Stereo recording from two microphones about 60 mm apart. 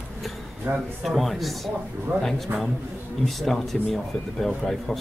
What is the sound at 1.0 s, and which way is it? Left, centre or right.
Speech, centre.